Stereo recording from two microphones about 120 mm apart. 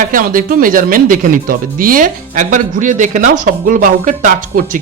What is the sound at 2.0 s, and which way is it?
A woman's voice, 90° right.